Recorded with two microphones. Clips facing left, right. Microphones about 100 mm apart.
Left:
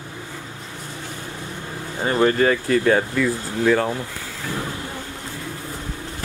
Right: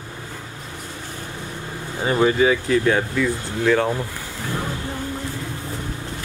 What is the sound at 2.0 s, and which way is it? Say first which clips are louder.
Speech: even; 10° right (ahead or behind).